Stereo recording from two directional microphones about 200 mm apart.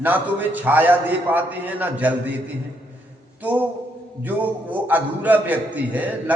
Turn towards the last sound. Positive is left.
turn(degrees=-10)  # may be behind; listen again after turning